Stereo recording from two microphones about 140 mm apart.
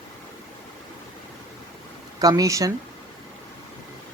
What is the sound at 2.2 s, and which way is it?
Speech, 25° right (ahead or behind).